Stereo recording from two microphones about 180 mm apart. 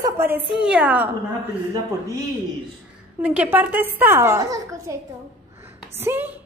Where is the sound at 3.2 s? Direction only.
5° right (ahead or behind).